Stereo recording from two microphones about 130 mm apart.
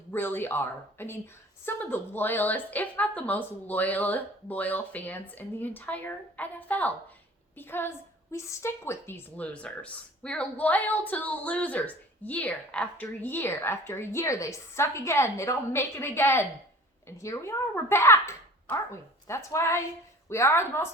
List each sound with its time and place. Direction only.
0.1 s a woman's voice: 15° left (ahead or behind)